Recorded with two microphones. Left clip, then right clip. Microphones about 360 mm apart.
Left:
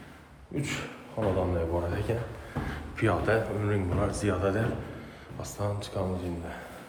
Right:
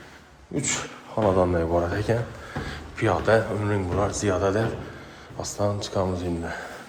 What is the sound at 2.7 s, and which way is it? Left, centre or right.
Speech, centre.